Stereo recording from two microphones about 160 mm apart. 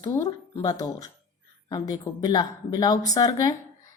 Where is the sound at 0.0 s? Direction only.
20° left (ahead or behind).